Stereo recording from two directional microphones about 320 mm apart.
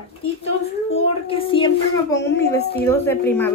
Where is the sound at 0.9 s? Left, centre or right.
Centre.